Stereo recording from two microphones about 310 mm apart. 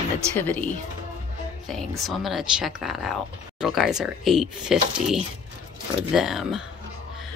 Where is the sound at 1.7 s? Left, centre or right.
Centre.